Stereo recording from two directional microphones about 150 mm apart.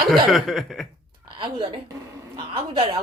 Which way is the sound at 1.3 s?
35° right (ahead or behind).